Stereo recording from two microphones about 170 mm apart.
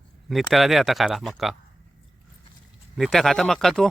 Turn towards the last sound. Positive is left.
turn(degrees=0)  # may be behind; listen again after turning